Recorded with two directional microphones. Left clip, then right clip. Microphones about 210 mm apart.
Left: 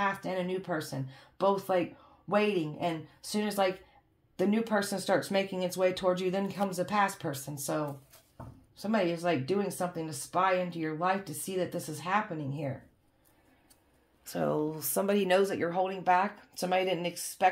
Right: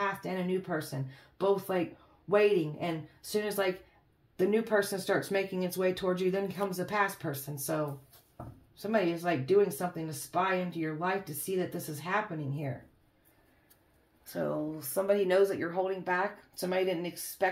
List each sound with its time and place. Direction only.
0.2 s speech: 35° left (ahead or behind)
8.7 s speech: 35° left (ahead or behind)
14.2 s speech: 40° left (ahead or behind)